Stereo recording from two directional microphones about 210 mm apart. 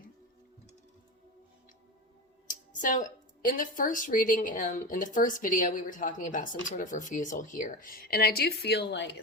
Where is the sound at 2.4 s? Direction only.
40° left (ahead or behind).